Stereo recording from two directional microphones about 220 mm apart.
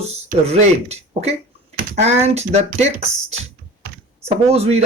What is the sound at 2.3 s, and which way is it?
Speech, 30° right (ahead or behind).